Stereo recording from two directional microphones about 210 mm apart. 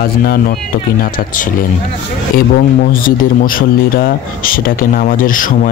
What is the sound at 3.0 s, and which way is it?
Speech, 40° left (ahead or behind).